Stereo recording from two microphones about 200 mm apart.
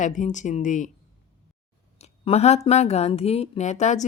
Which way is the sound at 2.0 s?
30° left (ahead or behind).